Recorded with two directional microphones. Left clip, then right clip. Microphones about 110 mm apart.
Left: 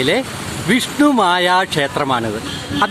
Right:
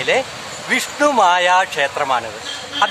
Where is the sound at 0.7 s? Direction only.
35° left (ahead or behind).